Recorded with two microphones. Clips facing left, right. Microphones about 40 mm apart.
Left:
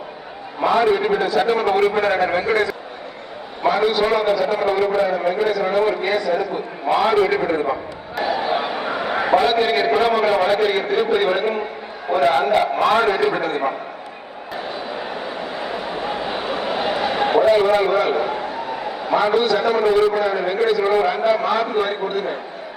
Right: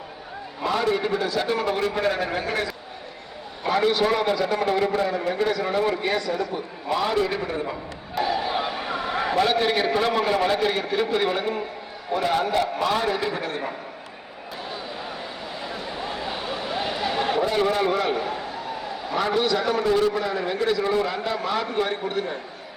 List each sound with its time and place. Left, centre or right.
0.6 s a man's voice: left
3.7 s a man's voice: centre; by 7.8 s left
8.2 s a sound: centre
10.2 s a man's voice: centre; by 13.7 s left
15.5 s a sound: left
17.7 s a man's voice: centre